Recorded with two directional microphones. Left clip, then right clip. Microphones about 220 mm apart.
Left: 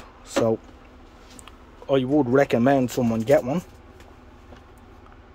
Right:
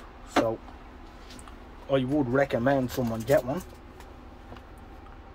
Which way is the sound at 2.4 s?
45° left (ahead or behind).